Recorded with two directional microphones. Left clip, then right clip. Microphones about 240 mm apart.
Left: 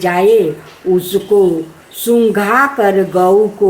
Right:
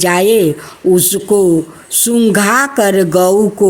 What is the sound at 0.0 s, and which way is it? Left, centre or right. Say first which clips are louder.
Speech: even; right.